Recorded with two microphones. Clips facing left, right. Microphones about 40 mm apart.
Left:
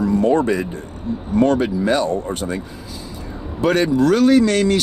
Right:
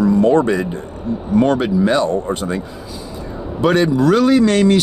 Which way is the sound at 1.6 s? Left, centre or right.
Right.